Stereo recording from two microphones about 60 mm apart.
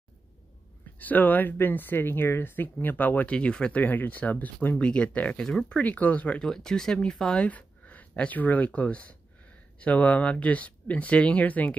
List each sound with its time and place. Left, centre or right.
0.9 s speech: left
3.3 s speech: centre
5.4 s speech: centre
5.7 s speech: left
6.4 s speech: centre
7.4 s speech: left